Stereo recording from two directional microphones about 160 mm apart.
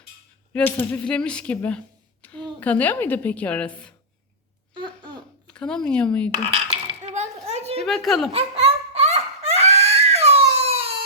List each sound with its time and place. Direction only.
0.5 s a woman's voice: 10° left (ahead or behind)
4.7 s babbling: 30° right (ahead or behind)
5.5 s speech: 5° left (ahead or behind)
7.0 s a sound: 45° right (ahead or behind)
7.9 s speech: centre (ahead or behind)
8.3 s laughter: 35° right (ahead or behind)